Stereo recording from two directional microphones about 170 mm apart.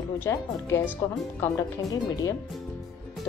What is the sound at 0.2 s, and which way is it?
Speech, 15° left (ahead or behind).